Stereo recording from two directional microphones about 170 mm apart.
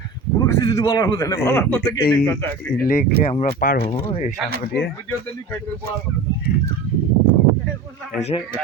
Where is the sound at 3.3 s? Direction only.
40° left (ahead or behind).